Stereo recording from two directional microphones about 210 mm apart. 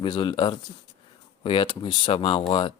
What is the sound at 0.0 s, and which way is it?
Speech, 20° left (ahead or behind).